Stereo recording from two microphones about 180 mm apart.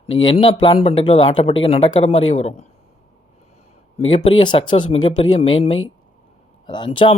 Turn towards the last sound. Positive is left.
turn(degrees=25)  # may be behind; listen again after turning